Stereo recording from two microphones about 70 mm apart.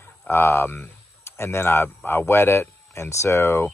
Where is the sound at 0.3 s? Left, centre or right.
Left.